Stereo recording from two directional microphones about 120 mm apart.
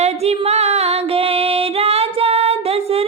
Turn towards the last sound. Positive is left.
turn(degrees=-55)  # may be behind; listen again after turning